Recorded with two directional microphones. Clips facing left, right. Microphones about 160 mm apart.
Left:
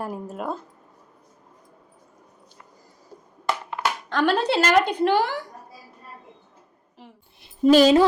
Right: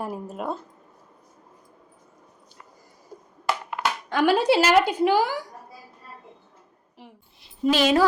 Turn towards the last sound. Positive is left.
turn(degrees=40)  # may be behind; listen again after turning